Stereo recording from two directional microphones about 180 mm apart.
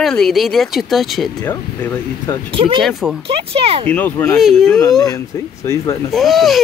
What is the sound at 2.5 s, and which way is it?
Speech, 30° right (ahead or behind).